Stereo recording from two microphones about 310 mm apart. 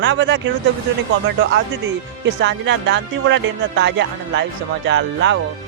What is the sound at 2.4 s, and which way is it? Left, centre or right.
Speech, right.